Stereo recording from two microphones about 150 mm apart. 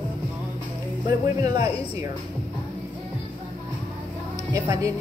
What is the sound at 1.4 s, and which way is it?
Speech, 25° right (ahead or behind).